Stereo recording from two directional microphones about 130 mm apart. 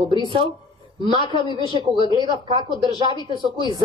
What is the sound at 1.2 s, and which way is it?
Speech, 35° left (ahead or behind).